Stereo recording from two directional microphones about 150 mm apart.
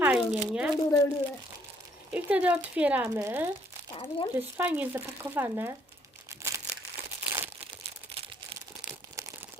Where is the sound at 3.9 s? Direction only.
35° left (ahead or behind).